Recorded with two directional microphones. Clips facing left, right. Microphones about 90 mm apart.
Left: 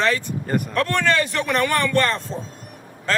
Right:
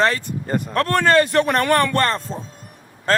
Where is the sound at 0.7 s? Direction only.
40° right (ahead or behind).